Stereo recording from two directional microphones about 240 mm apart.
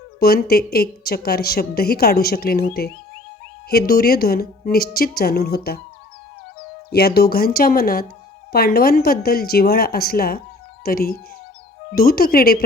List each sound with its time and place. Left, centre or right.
0.2 s a woman's voice: left